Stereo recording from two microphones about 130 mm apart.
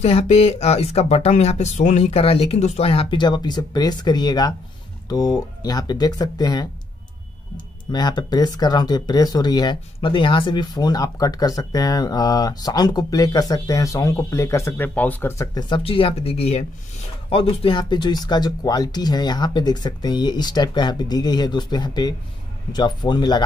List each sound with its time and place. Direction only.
0.0 s speech: 55° left (ahead or behind)
2.0 s speech: 50° left (ahead or behind); by 6.7 s 30° left (ahead or behind)
7.9 s speech: 30° left (ahead or behind)
15.7 s speech: 45° left (ahead or behind)